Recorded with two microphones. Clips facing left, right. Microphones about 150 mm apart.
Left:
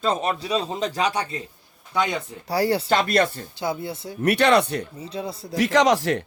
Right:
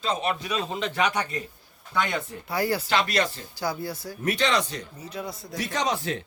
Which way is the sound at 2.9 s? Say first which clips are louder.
Left 5 dB; 50° left (ahead or behind).